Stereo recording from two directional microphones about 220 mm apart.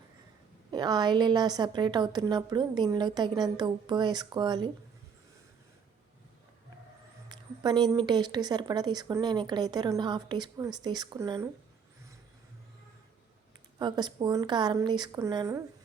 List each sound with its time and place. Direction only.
0.7 s a woman's voice: 20° right (ahead or behind)
7.3 s a woman's voice: 20° right (ahead or behind)
13.7 s a woman's voice: 20° right (ahead or behind)